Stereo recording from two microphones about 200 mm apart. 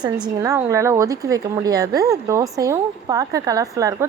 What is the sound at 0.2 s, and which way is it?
A woman's voice, 15° right (ahead or behind).